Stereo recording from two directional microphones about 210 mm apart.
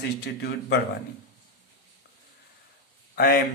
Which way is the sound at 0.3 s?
55° left (ahead or behind).